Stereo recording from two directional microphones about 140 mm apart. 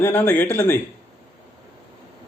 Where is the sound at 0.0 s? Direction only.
15° left (ahead or behind).